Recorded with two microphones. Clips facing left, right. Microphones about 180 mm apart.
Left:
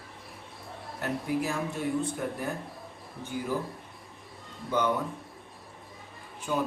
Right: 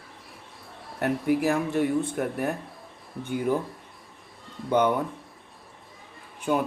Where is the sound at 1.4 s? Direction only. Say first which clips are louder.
Right 7 dB; 65° right (ahead or behind).